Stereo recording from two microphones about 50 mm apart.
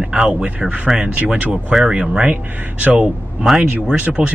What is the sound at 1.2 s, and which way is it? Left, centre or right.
Speech, right.